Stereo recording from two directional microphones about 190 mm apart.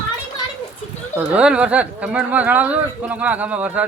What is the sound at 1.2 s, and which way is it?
Speech, 5° right (ahead or behind).